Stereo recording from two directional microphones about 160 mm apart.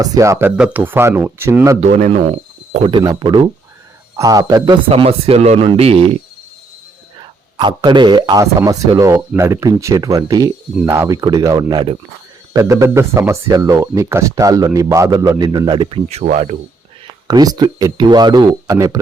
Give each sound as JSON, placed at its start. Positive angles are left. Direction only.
{"t": 0.0, "sound": "speech", "side_deg": -20}
{"t": 1.8, "sound": "speech", "side_deg": -45}
{"t": 2.9, "sound": "speech", "side_deg": -25}
{"t": 4.9, "sound": "speech", "side_deg": -40}
{"t": 7.5, "sound": "speech", "side_deg": -30}
{"t": 16.0, "sound": "speech", "side_deg": -45}
{"t": 17.2, "sound": "speech", "side_deg": -25}